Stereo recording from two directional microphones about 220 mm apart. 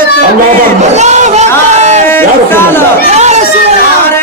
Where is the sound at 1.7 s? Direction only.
30° right (ahead or behind).